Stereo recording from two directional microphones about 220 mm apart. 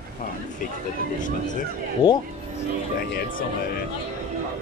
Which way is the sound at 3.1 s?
40° left (ahead or behind).